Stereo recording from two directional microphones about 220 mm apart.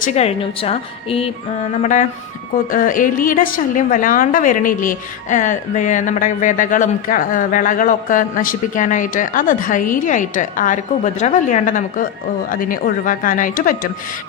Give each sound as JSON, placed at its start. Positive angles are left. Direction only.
{"t": 0.0, "sound": "a woman's voice", "side_deg": 30}